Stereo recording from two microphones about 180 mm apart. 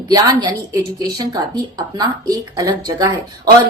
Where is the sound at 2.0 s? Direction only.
20° right (ahead or behind).